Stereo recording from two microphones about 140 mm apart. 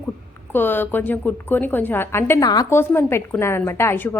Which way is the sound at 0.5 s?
15° left (ahead or behind).